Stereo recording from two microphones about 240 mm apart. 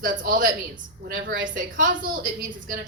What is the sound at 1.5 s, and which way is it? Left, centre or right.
Speech, right.